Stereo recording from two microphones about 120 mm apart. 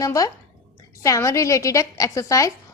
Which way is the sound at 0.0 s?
30° left (ahead or behind).